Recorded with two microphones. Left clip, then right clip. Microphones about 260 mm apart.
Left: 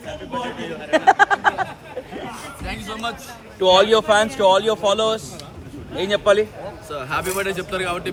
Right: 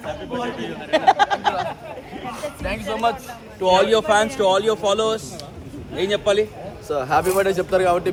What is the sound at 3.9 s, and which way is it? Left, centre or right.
Speech, left.